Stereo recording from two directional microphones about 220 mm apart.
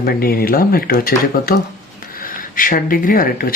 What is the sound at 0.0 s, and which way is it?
Speech, 45° left (ahead or behind).